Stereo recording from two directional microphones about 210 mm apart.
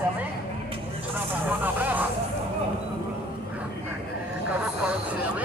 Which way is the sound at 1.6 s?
10° right (ahead or behind).